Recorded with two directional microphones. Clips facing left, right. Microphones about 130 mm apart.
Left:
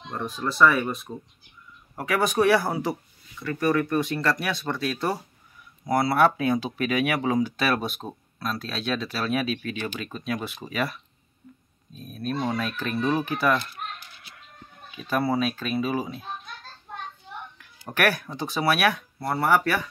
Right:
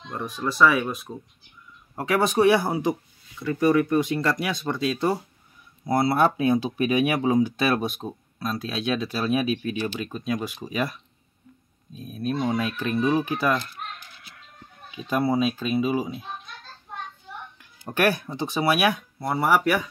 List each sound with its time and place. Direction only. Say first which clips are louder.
0.1 s speech: right 1 dB; 5° right (ahead or behind)
2.0 s speech: right 2 dB; 25° right (ahead or behind)
8.0 s speech: right 3 dB; 25° left (ahead or behind)
8.4 s speech: right 2 dB; 15° right (ahead or behind)
11.9 s speech: right 2 dB; 10° right (ahead or behind)
15.0 s speech: right 2 dB; 15° right (ahead or behind)
17.6 s speech: right 2 dB; 20° right (ahead or behind)